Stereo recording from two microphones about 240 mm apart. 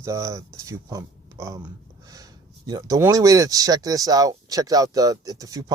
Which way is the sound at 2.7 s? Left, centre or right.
Centre.